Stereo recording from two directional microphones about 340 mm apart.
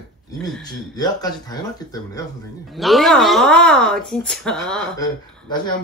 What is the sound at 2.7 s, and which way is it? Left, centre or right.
Speech, centre.